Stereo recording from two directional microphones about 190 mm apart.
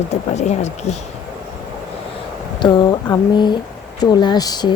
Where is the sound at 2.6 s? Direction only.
25° left (ahead or behind).